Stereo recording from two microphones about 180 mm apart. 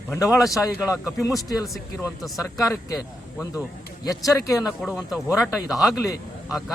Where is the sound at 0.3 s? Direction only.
Centre (ahead or behind).